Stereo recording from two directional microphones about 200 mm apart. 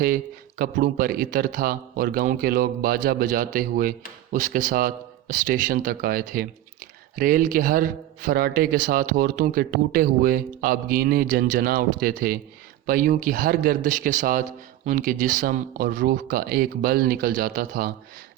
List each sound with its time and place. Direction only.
0.6 s a man's voice: 45° right (ahead or behind)